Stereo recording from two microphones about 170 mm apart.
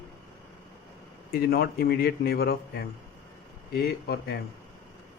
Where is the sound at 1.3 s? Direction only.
65° left (ahead or behind).